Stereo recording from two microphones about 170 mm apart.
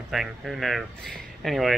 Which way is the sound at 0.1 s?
Centre (ahead or behind).